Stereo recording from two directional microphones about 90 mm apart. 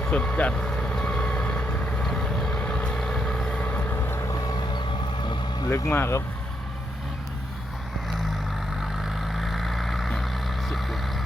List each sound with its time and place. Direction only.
0.0 s vehicle: 15° left (ahead or behind)
5.6 s speech: 30° left (ahead or behind)
8.8 s vehicle: centre (ahead or behind)